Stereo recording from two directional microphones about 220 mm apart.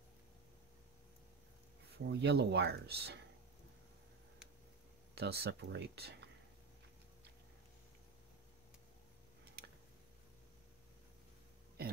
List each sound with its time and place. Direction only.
1.9 s speech: 50° right (ahead or behind)
5.1 s speech: 45° right (ahead or behind)